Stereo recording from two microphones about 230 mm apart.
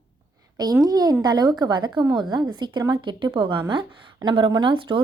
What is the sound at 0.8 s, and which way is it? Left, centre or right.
A woman's voice, centre.